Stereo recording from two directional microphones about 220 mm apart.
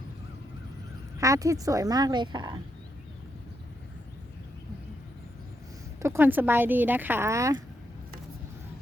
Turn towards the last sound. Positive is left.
turn(degrees=-15)  # may be behind; listen again after turning